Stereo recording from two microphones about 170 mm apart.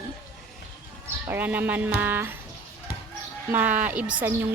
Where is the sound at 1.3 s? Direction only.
10° right (ahead or behind).